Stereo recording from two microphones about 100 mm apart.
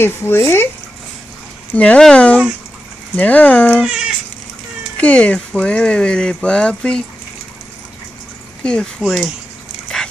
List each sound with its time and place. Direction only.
0.0 s speech: 25° left (ahead or behind)
1.7 s speech: 15° left (ahead or behind)
3.8 s speech: 5° right (ahead or behind)
4.9 s speech: 15° left (ahead or behind)
9.0 s speech: 5° right (ahead or behind)
9.9 s dog: 5° left (ahead or behind)